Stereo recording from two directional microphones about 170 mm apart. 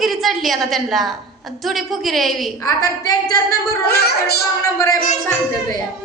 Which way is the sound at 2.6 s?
20° left (ahead or behind).